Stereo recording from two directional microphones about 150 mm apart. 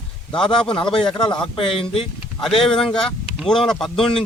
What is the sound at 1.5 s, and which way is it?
Speech, 35° left (ahead or behind).